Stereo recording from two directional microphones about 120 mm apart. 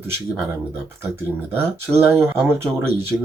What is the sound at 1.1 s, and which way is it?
Speech, 20° right (ahead or behind).